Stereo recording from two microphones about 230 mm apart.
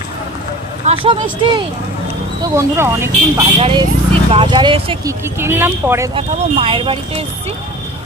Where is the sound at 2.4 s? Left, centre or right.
Centre.